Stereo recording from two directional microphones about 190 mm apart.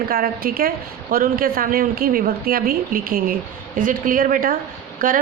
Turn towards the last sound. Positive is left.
turn(degrees=-45)  # may be behind; listen again after turning